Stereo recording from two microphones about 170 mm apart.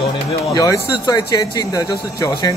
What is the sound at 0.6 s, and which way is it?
Speech, 20° left (ahead or behind).